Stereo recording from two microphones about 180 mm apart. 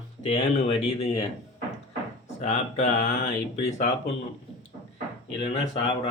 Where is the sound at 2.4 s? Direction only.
40° left (ahead or behind).